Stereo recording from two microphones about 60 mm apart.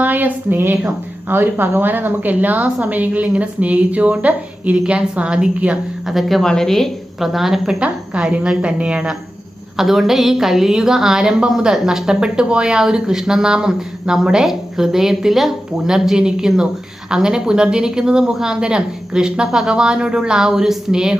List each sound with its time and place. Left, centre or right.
0.0 s a woman's voice: right
6.1 s a woman's voice: centre
7.2 s a woman's voice: centre
9.7 s a woman's voice: centre